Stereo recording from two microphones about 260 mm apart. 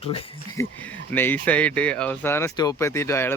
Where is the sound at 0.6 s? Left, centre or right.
Centre.